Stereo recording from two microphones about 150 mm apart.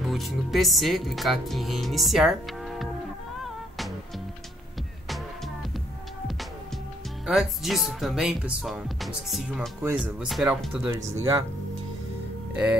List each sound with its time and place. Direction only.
0.0 s speech: centre (ahead or behind)
3.4 s music: centre (ahead or behind)
5.0 s music: centre (ahead or behind)
7.2 s speech: centre (ahead or behind)
10.9 s speech: 20° right (ahead or behind)